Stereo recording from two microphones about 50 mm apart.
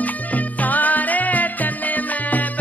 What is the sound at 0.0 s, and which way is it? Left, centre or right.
Music, left.